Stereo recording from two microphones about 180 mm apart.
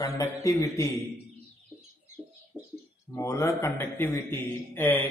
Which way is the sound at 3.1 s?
15° left (ahead or behind).